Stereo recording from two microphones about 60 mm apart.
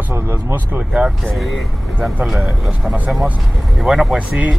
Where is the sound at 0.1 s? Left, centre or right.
Right.